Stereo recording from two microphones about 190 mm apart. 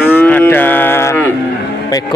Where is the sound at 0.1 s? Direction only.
10° left (ahead or behind).